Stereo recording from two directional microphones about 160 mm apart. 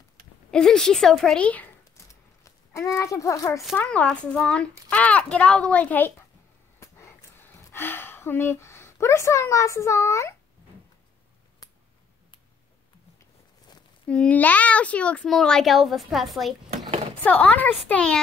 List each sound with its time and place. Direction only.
0.5 s a child's voice: 5° left (ahead or behind); by 3.6 s 20° left (ahead or behind)
3.7 s a child's voice: 10° left (ahead or behind)
6.8 s a sound: 15° left (ahead or behind)
14.0 s a child's voice: 5° left (ahead or behind)
16.8 s a sound: 40° right (ahead or behind)
17.2 s a child's voice: 10° left (ahead or behind)